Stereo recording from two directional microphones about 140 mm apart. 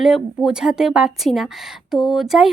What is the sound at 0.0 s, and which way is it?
Speech, 5° right (ahead or behind).